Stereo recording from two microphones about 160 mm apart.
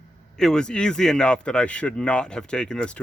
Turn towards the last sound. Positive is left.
turn(degrees=5)  # may be behind; listen again after turning